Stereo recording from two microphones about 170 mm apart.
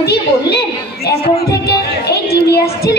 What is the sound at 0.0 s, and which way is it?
A child's voice, 70° left (ahead or behind).